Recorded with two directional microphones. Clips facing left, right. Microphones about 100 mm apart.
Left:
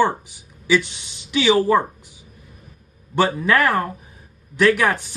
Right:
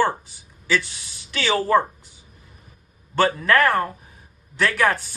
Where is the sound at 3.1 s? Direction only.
15° left (ahead or behind).